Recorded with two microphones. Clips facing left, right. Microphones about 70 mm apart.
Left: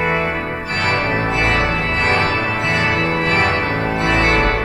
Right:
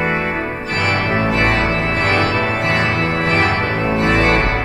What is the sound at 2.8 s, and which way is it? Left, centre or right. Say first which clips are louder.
Organ: even; left.